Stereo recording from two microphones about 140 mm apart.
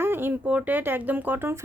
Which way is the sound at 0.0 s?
15° right (ahead or behind).